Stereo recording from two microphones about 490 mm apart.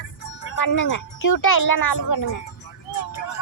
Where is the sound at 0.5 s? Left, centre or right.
Left.